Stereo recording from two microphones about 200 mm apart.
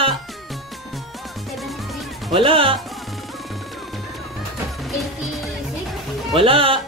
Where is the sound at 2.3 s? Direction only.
25° right (ahead or behind).